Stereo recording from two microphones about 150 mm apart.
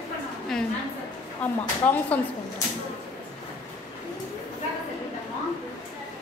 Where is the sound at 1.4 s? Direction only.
10° left (ahead or behind).